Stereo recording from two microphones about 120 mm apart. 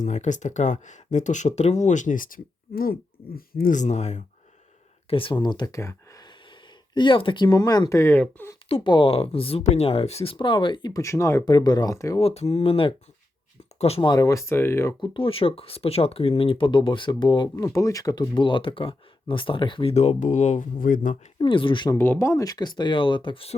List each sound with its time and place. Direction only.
0.0 s speech: 85° left
3.7 s speech: 85° left
5.0 s speech: 50° left (ahead or behind); by 6.2 s 25° left (ahead or behind)
6.9 s speech: 40° left (ahead or behind); by 8.5 s 15° left (ahead or behind)
8.7 s speech: 40° left (ahead or behind)
10.3 s speech: 40° left (ahead or behind)
10.9 s speech: 25° left (ahead or behind)
12.2 s speech: 60° left (ahead or behind)
14.0 s speech: 30° left (ahead or behind)
15.1 s speech: 50° left (ahead or behind)
17.7 s speech: 25° left (ahead or behind); by 19.9 s 45° left (ahead or behind)
19.9 s speech: 65° left (ahead or behind); by 21.2 s 90° left
21.3 s speech: 45° left (ahead or behind)
21.8 s speech: 20° left (ahead or behind); by 23.6 s 50° left (ahead or behind)